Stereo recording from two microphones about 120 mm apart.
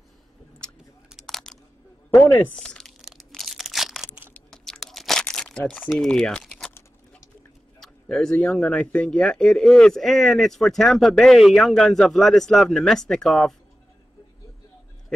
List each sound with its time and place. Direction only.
1.1 s crunch: centre (ahead or behind)
2.0 s speech: 20° left (ahead or behind)
2.5 s a sound: 5° left (ahead or behind)
4.3 s crunch: 5° left (ahead or behind)
5.2 s crumpling: 5° left (ahead or behind)
5.7 s speech: 5° left (ahead or behind)
7.8 s speech: 5° left (ahead or behind)